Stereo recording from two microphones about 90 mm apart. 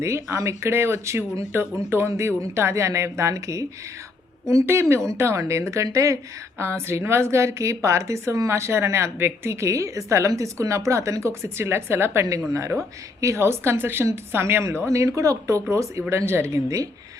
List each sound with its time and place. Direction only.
0.0 s a woman's voice: 30° right (ahead or behind)